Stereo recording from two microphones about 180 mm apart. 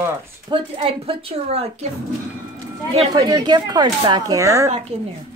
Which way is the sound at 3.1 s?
20° right (ahead or behind).